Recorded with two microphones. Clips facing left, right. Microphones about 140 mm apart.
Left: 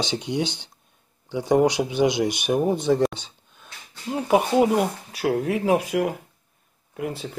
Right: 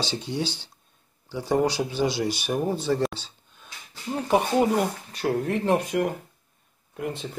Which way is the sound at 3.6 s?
10° left (ahead or behind).